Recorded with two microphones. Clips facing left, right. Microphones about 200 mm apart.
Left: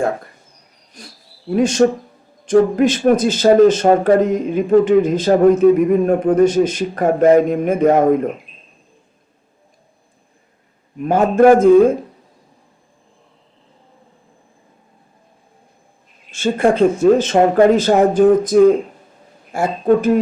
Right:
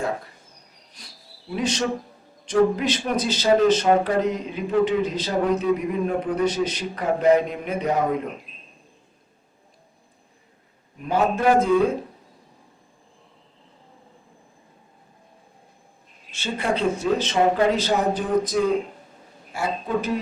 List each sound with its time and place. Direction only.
1.0 s a man's voice: 50° left (ahead or behind)
11.0 s a man's voice: 50° left (ahead or behind)
16.3 s a man's voice: 50° left (ahead or behind)